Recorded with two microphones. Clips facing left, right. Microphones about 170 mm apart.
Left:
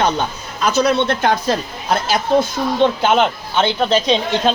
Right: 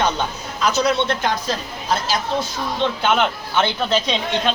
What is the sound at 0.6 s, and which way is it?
A woman's voice, 55° left (ahead or behind).